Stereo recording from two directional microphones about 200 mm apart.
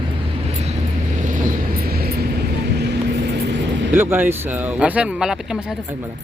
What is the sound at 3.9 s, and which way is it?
Speech, 10° right (ahead or behind).